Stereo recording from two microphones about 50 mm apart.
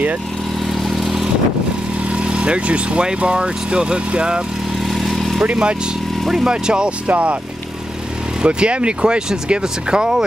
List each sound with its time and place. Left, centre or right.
0.7 s vehicle: centre
2.0 s speech: right
4.7 s vehicle: centre
5.4 s speech: right
6.2 s speech: centre; by 7.3 s right
8.4 s speech: right